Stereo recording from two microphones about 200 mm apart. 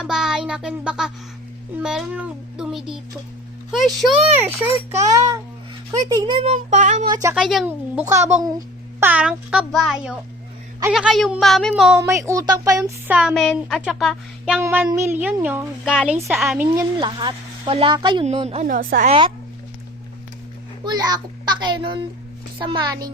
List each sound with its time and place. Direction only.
0.0 s a sound: centre (ahead or behind)
1.8 s a child's voice: 5° right (ahead or behind)
4.4 s a woman's voice: 10° right (ahead or behind)
6.1 s speech: 25° right (ahead or behind)
7.1 s a woman's voice: 15° right (ahead or behind)
7.3 s a child's voice: centre (ahead or behind)
8.0 s a woman's voice: 15° right (ahead or behind)
11.9 s a woman's voice: 15° right (ahead or behind)
13.1 s a child's voice: centre (ahead or behind)
16.7 s speech: 20° right (ahead or behind); by 19.1 s 40° right (ahead or behind)
20.8 s speech: 20° right (ahead or behind)